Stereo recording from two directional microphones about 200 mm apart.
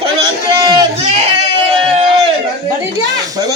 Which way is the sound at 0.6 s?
20° right (ahead or behind).